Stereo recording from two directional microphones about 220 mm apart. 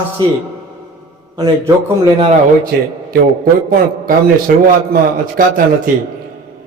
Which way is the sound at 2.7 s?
45° right (ahead or behind).